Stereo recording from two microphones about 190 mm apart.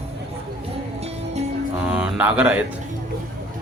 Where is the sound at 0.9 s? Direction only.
35° right (ahead or behind).